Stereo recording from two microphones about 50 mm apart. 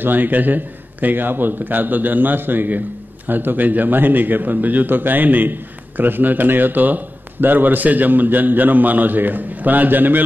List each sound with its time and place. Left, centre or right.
0.0 s a man's voice: right